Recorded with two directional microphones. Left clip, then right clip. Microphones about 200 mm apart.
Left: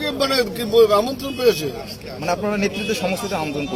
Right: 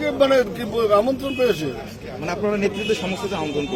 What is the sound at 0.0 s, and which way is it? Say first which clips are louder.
Speech: right 3 dB; 10° left (ahead or behind).